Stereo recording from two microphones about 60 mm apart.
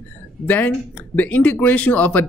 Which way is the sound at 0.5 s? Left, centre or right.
Left.